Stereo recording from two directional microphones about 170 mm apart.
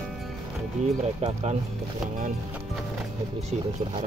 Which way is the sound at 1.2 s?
35° right (ahead or behind).